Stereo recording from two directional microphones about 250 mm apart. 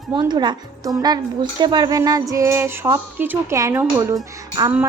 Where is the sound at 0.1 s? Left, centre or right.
Centre.